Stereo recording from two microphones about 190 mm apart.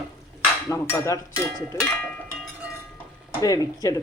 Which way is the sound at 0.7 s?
15° left (ahead or behind).